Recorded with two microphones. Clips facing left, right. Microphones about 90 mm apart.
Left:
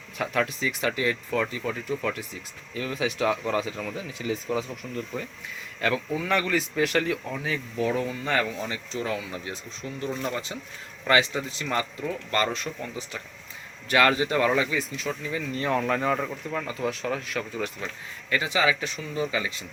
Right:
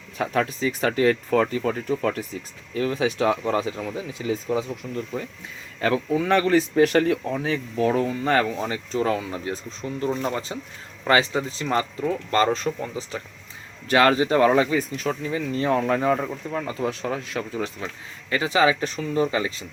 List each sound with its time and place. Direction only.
0.2 s speech: 35° right (ahead or behind)